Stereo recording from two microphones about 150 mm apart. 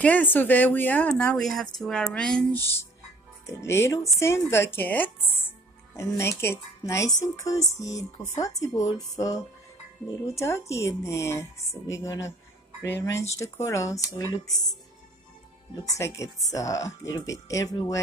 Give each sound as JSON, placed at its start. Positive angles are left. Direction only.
{"t": 0.0, "sound": "speech", "side_deg": 10}
{"t": 2.6, "sound": "speech", "side_deg": 15}
{"t": 16.0, "sound": "speech", "side_deg": 20}